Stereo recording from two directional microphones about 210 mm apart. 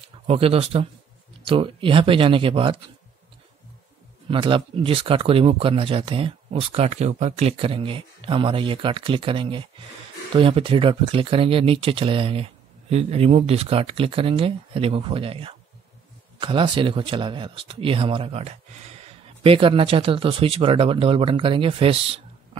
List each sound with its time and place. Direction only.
0.3 s speech: 25° right (ahead or behind)
4.3 s speech: 25° right (ahead or behind)